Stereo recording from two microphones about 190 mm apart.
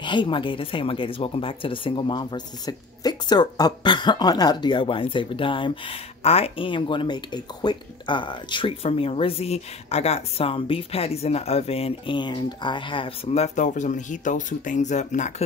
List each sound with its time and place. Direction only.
0.0 s speech: 25° left (ahead or behind)